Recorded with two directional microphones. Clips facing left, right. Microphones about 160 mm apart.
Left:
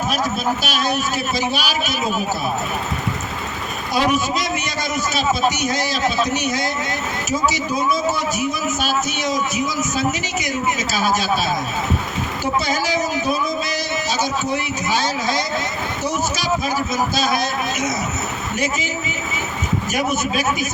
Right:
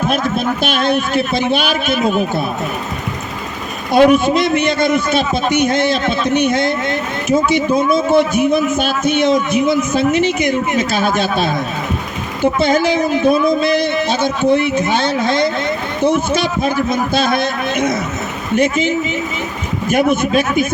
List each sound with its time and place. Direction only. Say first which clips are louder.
0.1 s a man's voice: right 4 dB; 55° right (ahead or behind)
3.9 s a man's voice: right 9 dB; 55° right (ahead or behind)